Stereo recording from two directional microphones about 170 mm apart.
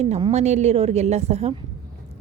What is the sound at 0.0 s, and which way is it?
Speech, 40° right (ahead or behind).